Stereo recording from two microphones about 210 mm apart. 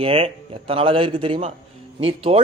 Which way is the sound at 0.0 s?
25° right (ahead or behind).